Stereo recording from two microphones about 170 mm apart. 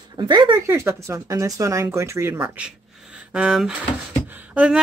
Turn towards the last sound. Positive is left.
turn(degrees=-5)  # may be behind; listen again after turning